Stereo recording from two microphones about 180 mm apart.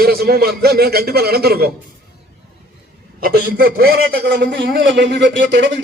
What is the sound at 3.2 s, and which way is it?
A man's voice, 55° right (ahead or behind).